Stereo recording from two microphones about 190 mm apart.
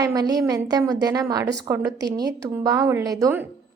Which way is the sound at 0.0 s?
20° right (ahead or behind).